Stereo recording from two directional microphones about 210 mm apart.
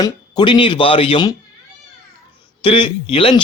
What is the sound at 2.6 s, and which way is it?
Speech, 25° left (ahead or behind).